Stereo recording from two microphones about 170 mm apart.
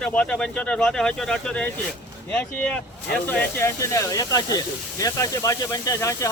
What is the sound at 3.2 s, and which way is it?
Speech, 15° left (ahead or behind).